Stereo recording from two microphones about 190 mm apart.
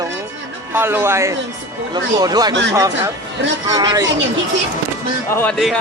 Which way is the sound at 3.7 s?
20° right (ahead or behind).